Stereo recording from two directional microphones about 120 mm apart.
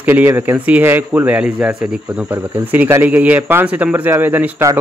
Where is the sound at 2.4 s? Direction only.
20° right (ahead or behind).